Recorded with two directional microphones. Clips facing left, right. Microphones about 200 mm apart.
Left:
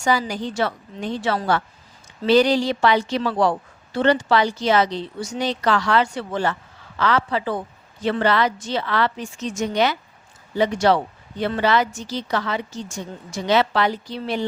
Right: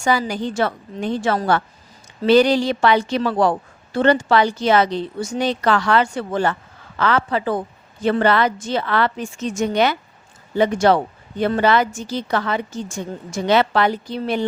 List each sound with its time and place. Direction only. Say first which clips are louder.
0.0 s a woman's voice: right 2 dB; 55° right (ahead or behind)